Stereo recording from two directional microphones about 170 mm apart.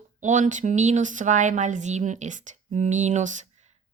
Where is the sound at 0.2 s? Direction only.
45° right (ahead or behind).